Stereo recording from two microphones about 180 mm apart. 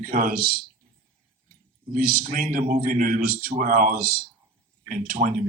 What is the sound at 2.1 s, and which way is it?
Speech, 50° right (ahead or behind).